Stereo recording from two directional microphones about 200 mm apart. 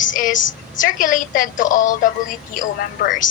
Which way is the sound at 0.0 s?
40° left (ahead or behind).